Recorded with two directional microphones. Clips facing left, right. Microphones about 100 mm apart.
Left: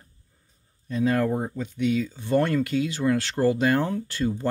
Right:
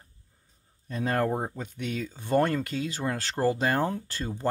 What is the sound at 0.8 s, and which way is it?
Speech, 45° right (ahead or behind).